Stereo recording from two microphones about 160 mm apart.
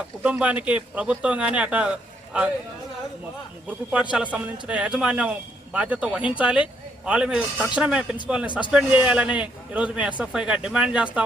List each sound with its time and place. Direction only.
0.2 s speech: 10° right (ahead or behind)
4.1 s speech: 10° right (ahead or behind)